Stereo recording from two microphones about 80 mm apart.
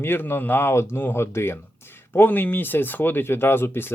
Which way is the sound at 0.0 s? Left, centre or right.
Left.